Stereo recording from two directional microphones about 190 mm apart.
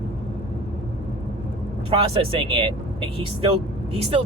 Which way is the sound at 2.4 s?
25° right (ahead or behind).